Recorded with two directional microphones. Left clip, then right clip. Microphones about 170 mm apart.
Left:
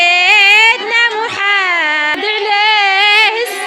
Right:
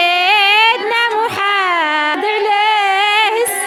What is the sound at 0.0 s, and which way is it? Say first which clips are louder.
Child singing: left 3 dB; 35° right (ahead or behind).